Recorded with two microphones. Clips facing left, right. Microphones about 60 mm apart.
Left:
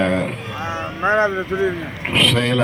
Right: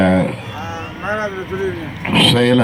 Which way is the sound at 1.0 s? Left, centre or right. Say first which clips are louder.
Left 4 dB; left.